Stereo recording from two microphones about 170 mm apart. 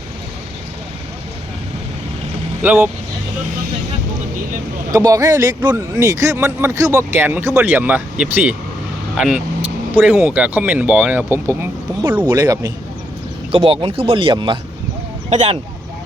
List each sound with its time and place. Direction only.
2.6 s a man's voice: 10° right (ahead or behind)
4.9 s a man's voice: 20° right (ahead or behind)
12.2 s speech: 25° right (ahead or behind)
15.3 s speech: 40° right (ahead or behind)